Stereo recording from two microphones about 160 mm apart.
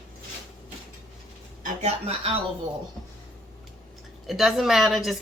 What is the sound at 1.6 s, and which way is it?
Speech, 45° right (ahead or behind).